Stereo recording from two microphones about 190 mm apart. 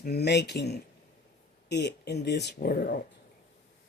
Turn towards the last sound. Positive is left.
turn(degrees=55)  # may be behind; listen again after turning